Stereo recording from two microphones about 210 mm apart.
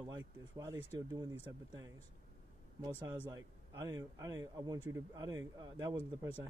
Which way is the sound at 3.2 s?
15° right (ahead or behind).